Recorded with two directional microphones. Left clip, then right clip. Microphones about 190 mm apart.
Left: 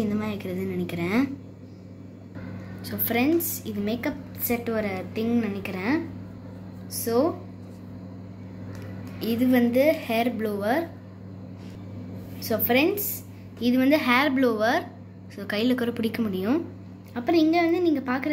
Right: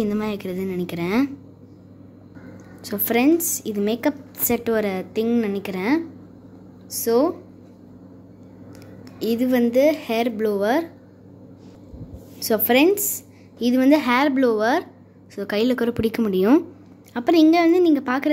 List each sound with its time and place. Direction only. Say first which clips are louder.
0.0 s a woman's voice: right 5 dB; 60° right (ahead or behind)
2.8 s a woman's voice: right 6 dB; 55° right (ahead or behind)
9.2 s a woman's voice: right 3 dB; 55° right (ahead or behind)
12.4 s a woman's voice: right 5 dB; 55° right (ahead or behind)